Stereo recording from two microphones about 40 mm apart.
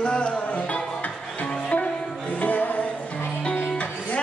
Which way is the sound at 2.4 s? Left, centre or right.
Left.